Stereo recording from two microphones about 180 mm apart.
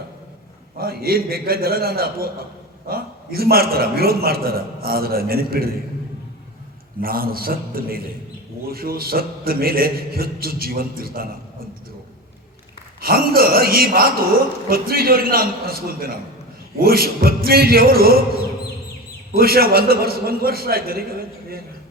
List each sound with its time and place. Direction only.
0.8 s a man's voice: 55° right (ahead or behind)
7.0 s a man's voice: 55° right (ahead or behind)
13.0 s a man's voice: 55° right (ahead or behind)
19.3 s a man's voice: 55° right (ahead or behind)